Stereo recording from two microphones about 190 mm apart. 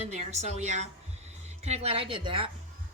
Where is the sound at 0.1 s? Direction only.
35° right (ahead or behind).